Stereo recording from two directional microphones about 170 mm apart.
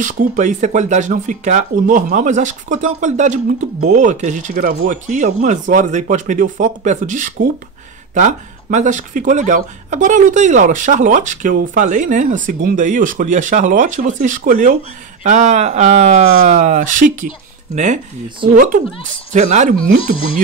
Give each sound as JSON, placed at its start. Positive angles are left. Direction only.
{"t": 0.0, "sound": "speech", "side_deg": -45}
{"t": 19.3, "sound": "speech", "side_deg": -45}